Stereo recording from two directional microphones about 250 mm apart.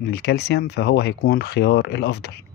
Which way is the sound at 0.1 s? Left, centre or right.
Left.